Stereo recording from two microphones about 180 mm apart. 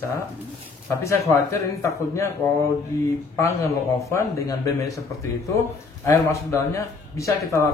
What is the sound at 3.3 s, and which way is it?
Speech, 15° left (ahead or behind).